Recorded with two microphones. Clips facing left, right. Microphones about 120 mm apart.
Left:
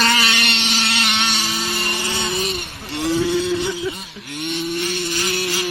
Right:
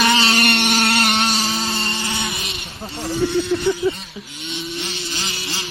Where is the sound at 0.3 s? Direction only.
45° right (ahead or behind).